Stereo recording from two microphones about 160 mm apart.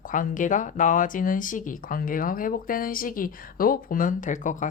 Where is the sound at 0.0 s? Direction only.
55° left (ahead or behind).